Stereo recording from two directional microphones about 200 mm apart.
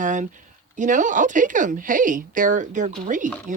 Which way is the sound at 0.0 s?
40° right (ahead or behind).